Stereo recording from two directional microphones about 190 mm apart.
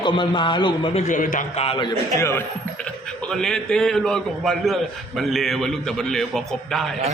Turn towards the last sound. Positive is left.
turn(degrees=0)  # may be behind; listen again after turning